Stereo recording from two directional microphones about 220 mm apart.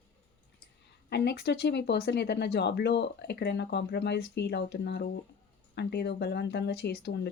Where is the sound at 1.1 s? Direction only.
50° left (ahead or behind).